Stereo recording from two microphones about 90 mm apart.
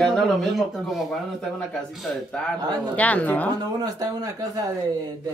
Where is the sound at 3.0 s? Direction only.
15° left (ahead or behind).